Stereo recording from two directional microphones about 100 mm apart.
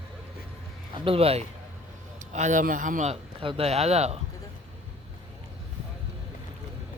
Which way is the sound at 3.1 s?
90° right.